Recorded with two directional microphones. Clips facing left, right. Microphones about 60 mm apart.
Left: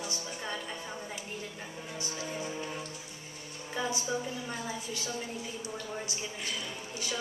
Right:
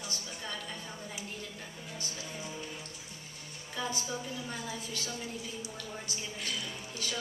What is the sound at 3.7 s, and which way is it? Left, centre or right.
A woman's voice, centre.